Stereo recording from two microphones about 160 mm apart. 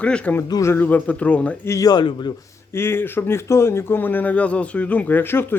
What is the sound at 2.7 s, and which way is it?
Speech, 15° left (ahead or behind).